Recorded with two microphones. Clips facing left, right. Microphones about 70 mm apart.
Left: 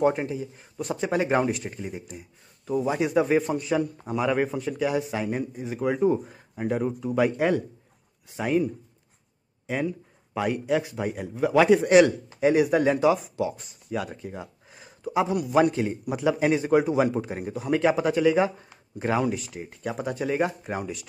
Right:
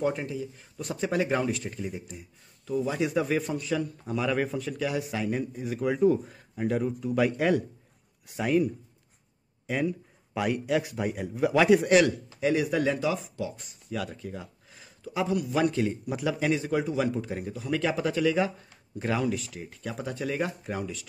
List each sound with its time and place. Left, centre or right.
0.0 s speech: left
3.3 s a man's voice: left; by 5.9 s centre
5.9 s speech: left
6.2 s speech: centre
9.7 s a man's voice: centre
12.4 s speech: left
13.8 s a sound: left
15.1 s speech: centre
15.8 s speech: centre
16.3 s speech: left